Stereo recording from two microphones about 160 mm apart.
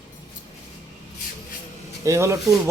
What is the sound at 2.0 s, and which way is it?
Speech, 20° right (ahead or behind).